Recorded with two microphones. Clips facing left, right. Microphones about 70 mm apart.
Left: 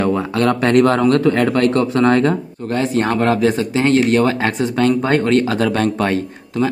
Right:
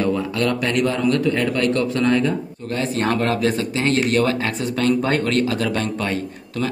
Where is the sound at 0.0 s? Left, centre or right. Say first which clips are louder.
Left 4 dB; left.